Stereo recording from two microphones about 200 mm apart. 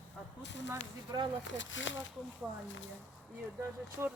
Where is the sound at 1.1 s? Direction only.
20° right (ahead or behind).